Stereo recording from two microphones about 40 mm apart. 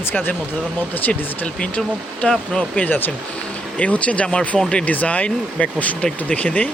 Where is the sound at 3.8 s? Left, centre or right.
Left.